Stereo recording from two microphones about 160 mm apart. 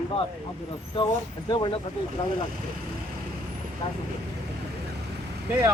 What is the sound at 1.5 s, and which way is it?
Speech, 30° left (ahead or behind).